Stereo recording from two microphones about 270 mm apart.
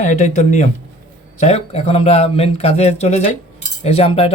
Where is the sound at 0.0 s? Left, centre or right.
Left.